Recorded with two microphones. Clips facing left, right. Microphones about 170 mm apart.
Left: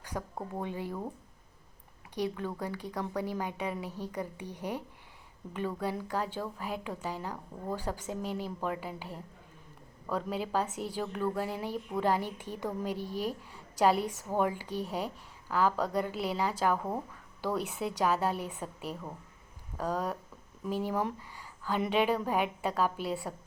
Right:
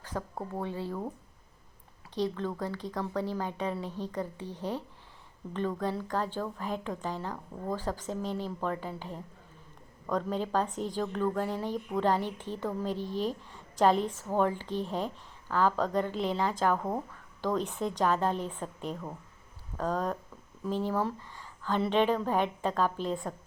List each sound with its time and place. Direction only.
0.0 s a sound: 15° left (ahead or behind)
0.6 s a woman's voice: 15° left (ahead or behind)
2.1 s a woman's voice: 10° left (ahead or behind)